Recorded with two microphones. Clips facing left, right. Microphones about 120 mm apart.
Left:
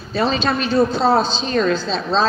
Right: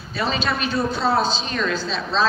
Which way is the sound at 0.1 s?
35° left (ahead or behind).